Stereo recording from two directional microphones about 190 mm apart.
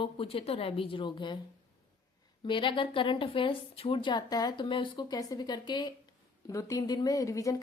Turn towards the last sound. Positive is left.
turn(degrees=15)  # may be behind; listen again after turning